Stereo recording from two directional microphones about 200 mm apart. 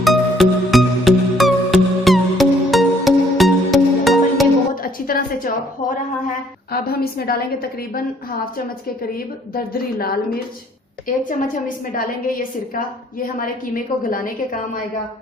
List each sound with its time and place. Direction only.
0.0 s music: centre (ahead or behind)
4.7 s a sound: 45° left (ahead or behind)
6.7 s a woman's voice: 50° left (ahead or behind)
9.1 s a woman's voice: 50° left (ahead or behind)